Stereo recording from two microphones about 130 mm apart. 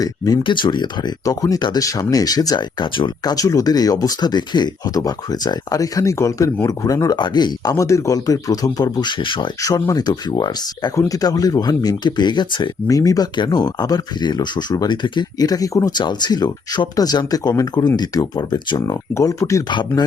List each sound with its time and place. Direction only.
0.0 s speech: 35° left (ahead or behind)
9.6 s speech: 25° left (ahead or behind)
19.7 s speech: 35° left (ahead or behind)